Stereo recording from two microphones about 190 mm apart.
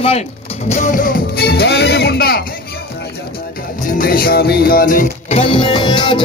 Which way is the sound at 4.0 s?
50° left (ahead or behind).